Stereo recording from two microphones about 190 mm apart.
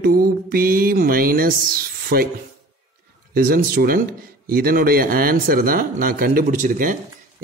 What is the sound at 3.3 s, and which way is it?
Speech, 50° right (ahead or behind).